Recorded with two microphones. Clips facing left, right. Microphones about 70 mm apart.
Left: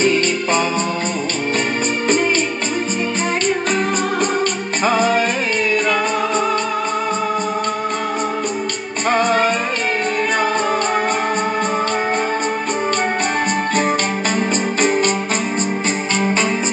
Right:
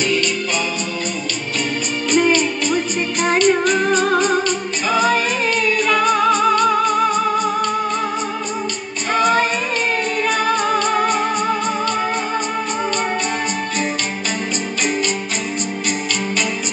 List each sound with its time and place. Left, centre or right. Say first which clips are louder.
0.0 s music: left 3 dB; left
3.3 s music: right 5 dB; left